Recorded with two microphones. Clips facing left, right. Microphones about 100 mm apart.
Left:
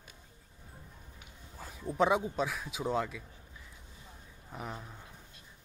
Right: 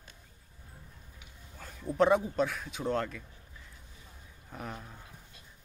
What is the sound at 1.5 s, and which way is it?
Bow-wow, 10° left (ahead or behind).